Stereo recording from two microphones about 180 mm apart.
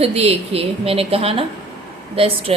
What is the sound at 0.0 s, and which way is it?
A woman's voice, 35° right (ahead or behind).